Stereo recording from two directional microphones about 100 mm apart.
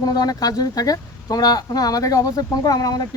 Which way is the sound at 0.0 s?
40° left (ahead or behind).